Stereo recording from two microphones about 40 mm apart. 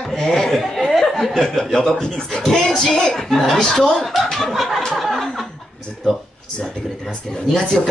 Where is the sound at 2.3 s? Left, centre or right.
Centre.